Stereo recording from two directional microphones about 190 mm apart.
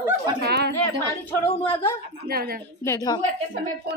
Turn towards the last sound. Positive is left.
turn(degrees=15)  # may be behind; listen again after turning